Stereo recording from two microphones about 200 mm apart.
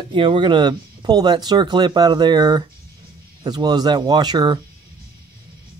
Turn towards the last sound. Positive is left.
turn(degrees=-20)  # may be behind; listen again after turning